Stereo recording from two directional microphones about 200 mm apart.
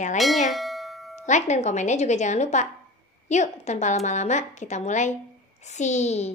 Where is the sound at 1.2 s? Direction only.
35° left (ahead or behind).